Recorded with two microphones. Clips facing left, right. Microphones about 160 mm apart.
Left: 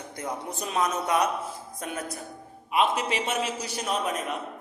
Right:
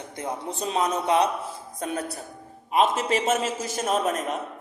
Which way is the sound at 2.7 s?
40° right (ahead or behind).